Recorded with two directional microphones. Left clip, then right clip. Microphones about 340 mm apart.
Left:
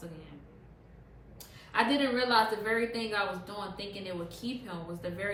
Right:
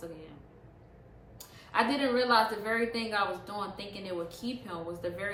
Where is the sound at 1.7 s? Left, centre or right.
Centre.